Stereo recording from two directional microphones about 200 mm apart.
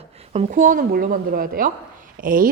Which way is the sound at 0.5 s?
45° right (ahead or behind).